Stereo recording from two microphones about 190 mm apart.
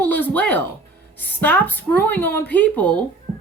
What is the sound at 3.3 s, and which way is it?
Music, 35° right (ahead or behind).